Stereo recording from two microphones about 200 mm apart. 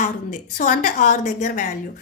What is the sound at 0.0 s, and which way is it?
A woman's voice, 40° left (ahead or behind).